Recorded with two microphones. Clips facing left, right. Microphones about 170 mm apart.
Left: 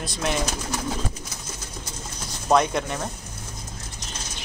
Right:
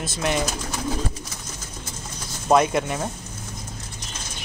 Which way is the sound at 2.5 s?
5° right (ahead or behind).